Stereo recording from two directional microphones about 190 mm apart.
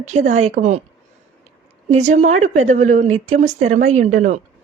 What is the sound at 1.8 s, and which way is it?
A woman's voice, 35° right (ahead or behind).